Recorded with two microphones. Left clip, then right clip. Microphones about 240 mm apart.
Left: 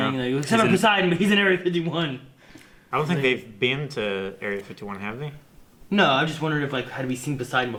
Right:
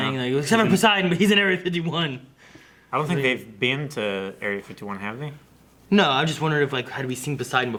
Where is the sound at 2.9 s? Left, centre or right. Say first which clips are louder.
Even; left.